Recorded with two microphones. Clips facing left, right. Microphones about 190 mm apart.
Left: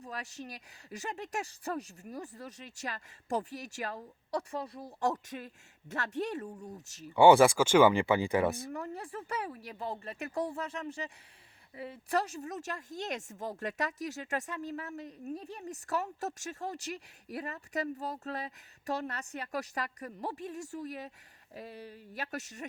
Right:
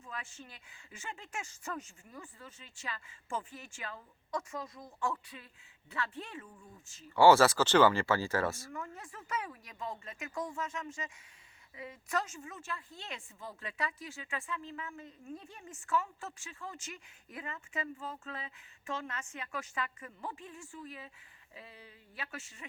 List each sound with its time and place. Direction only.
0.0 s speech: 40° left (ahead or behind)
6.8 s speech: 75° left (ahead or behind)
7.2 s speech: 15° left (ahead or behind)
8.7 s speech: 35° left (ahead or behind)